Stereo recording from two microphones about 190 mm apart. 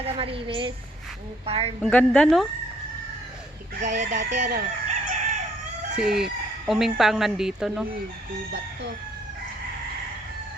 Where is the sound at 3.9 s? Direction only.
60° right (ahead or behind).